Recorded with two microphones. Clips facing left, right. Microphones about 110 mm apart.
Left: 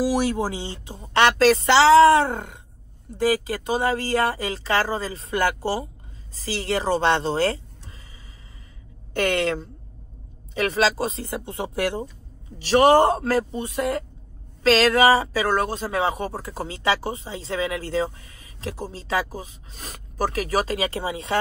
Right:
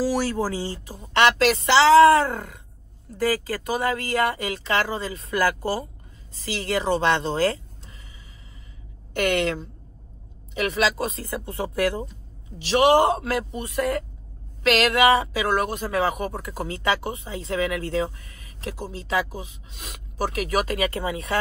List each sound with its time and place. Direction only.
0.0 s speech: 20° left (ahead or behind)
9.1 s speech: 35° left (ahead or behind)
12.5 s speech: 40° left (ahead or behind)
13.6 s speech: 25° left (ahead or behind)
14.6 s speech: 35° left (ahead or behind)